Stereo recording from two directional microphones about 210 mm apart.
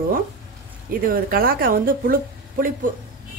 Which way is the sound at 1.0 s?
45° right (ahead or behind).